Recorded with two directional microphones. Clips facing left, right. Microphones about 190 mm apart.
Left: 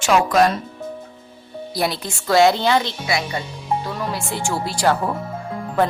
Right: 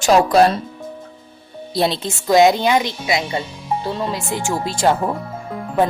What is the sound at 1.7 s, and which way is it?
A woman's voice, 25° right (ahead or behind).